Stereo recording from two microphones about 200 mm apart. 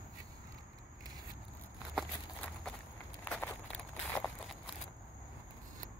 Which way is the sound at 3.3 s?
5° left (ahead or behind).